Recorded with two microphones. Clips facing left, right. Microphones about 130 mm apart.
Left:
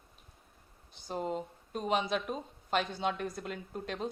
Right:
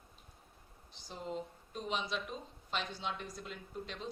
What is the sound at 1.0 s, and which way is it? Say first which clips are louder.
Speech: left 6 dB; 55° left (ahead or behind).